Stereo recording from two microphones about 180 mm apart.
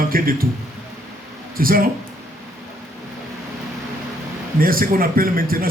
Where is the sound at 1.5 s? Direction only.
55° right (ahead or behind).